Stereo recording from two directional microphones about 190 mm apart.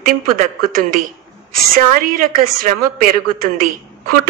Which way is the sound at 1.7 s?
50° right (ahead or behind).